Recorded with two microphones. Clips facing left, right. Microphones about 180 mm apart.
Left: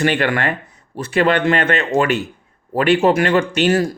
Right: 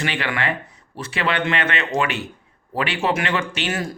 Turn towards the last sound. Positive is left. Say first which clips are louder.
# left 9 dB
turn(degrees=40)  # may be behind; listen again after turning